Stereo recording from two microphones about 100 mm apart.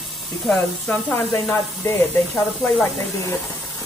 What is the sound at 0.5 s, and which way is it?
Speech, 10° left (ahead or behind).